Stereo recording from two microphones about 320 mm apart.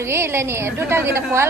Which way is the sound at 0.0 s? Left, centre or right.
Centre.